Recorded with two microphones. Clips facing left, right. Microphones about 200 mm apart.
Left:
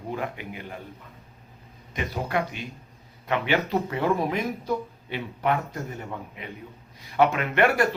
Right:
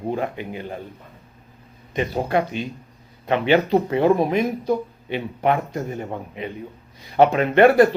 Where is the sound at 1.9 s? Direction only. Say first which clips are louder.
Right 7 dB; 30° right (ahead or behind).